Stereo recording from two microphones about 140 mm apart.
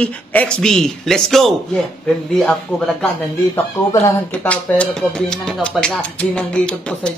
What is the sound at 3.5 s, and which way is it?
Speech, 20° left (ahead or behind).